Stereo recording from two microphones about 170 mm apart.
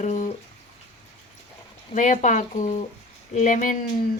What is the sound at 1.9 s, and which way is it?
Speech, 45° left (ahead or behind).